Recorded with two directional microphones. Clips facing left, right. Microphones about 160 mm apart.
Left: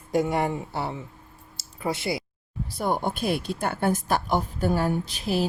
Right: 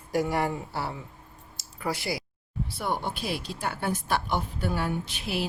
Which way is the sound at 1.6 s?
25° left (ahead or behind).